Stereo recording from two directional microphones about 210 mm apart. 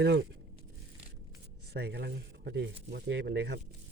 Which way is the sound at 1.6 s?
50° right (ahead or behind).